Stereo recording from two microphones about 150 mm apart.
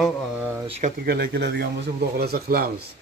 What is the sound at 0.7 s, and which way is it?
Speech, 50° right (ahead or behind).